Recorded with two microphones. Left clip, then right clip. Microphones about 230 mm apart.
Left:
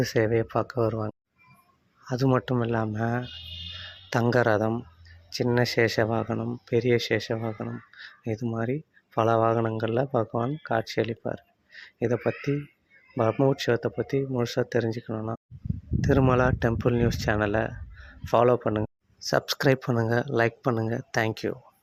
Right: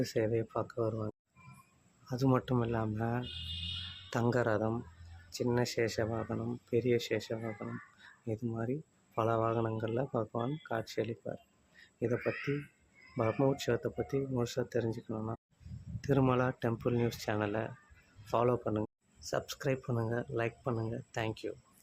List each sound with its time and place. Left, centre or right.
0.0 s speech: left
7.9 s a sound: left
9.1 s speech: left